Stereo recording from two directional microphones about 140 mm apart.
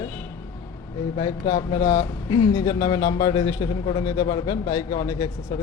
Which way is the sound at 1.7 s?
60° left (ahead or behind).